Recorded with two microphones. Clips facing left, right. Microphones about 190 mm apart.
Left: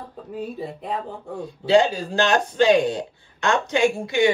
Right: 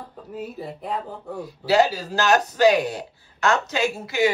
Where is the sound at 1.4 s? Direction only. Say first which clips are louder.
Left 2 dB; 25° left (ahead or behind).